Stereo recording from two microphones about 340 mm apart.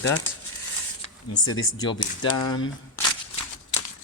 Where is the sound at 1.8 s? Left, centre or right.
Centre.